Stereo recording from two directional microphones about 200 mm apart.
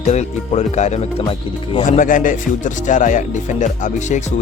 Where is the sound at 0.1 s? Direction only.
35° left (ahead or behind).